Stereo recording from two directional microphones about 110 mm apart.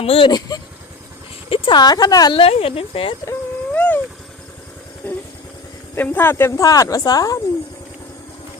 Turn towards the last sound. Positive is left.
turn(degrees=35)  # may be behind; listen again after turning